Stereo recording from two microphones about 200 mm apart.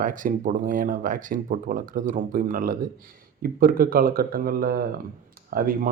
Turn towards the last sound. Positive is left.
turn(degrees=-45)  # may be behind; listen again after turning